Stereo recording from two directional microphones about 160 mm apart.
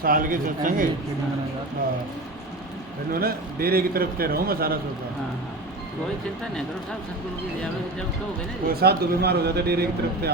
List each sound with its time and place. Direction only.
0.0 s speech: 60° right (ahead or behind)
3.1 s a man's voice: 70° right (ahead or behind)
8.7 s speech: 80° right